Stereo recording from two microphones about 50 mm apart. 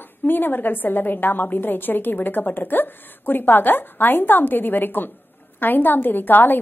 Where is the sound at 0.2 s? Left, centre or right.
Left.